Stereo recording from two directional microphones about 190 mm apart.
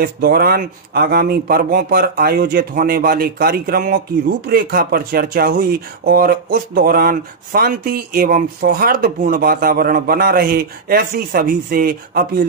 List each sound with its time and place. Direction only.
0.0 s speech: 55° right (ahead or behind)